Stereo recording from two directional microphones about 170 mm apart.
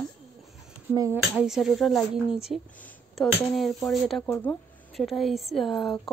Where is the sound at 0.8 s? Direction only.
15° right (ahead or behind).